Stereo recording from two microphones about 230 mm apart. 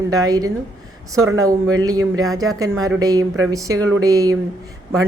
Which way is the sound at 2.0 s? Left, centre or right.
Right.